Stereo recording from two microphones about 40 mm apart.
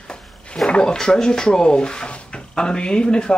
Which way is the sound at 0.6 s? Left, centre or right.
Left.